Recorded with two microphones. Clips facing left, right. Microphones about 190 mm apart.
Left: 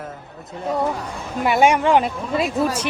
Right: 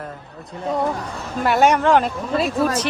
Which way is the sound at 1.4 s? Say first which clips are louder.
Even; 10° left (ahead or behind).